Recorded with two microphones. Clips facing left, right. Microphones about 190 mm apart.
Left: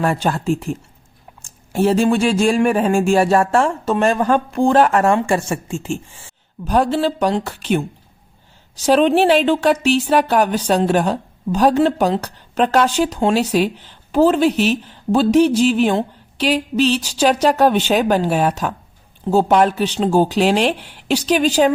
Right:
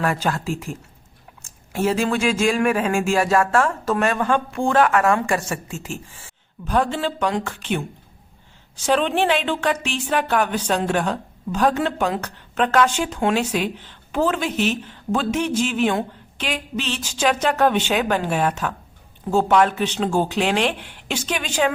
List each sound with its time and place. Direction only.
0.0 s speech: 30° left (ahead or behind)
6.7 s speech: 40° left (ahead or behind)